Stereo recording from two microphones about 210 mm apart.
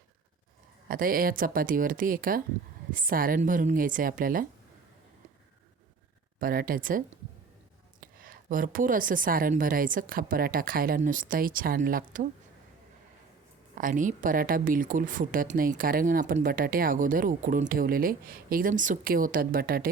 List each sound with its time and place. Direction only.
0.9 s speech: 40° right (ahead or behind)
6.4 s speech: 45° right (ahead or behind)
8.0 s speech: 40° right (ahead or behind)
13.7 s speech: 40° right (ahead or behind)